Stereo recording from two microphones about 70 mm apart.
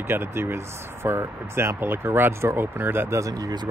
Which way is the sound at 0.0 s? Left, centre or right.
Right.